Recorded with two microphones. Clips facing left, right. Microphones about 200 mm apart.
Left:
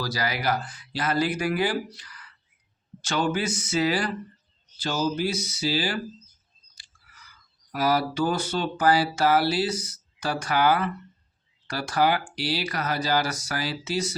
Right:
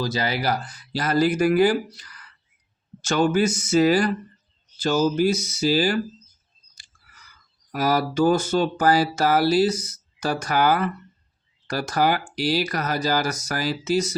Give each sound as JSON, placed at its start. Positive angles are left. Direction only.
{"t": 0.0, "sound": "speech", "side_deg": -25}
{"t": 7.7, "sound": "speech", "side_deg": -45}